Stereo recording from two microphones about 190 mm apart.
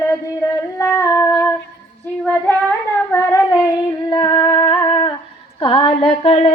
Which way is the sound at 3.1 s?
10° left (ahead or behind).